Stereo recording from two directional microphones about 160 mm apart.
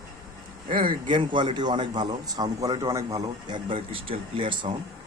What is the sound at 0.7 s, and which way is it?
A man's voice, 30° right (ahead or behind).